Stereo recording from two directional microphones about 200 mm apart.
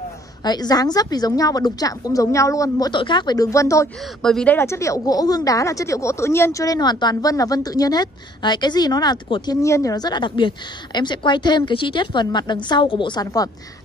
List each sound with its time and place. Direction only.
0.4 s speech: 20° left (ahead or behind)
4.2 s speech: 5° left (ahead or behind)